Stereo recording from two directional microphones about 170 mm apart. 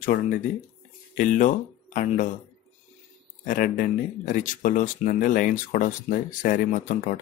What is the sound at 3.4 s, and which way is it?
Speech, 55° left (ahead or behind).